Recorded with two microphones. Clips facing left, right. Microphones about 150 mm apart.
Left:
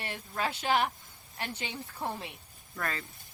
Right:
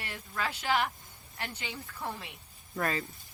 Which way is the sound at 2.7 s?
20° right (ahead or behind).